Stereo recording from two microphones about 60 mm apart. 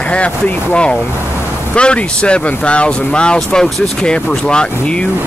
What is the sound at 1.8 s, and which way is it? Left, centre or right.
Speech, centre.